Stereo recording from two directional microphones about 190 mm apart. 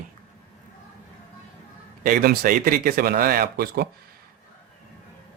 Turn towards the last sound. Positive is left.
turn(degrees=-55)  # may be behind; listen again after turning